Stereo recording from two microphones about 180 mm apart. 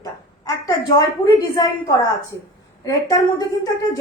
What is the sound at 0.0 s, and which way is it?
A woman's voice, 20° left (ahead or behind).